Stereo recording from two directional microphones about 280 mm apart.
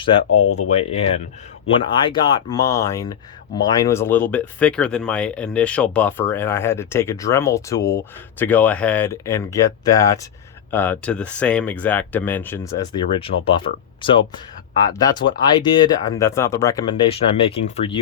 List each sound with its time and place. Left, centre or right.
0.3 s speech: left
0.9 s speech: left